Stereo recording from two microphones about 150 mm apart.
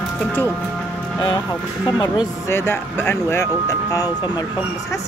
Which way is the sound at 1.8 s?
30° left (ahead or behind).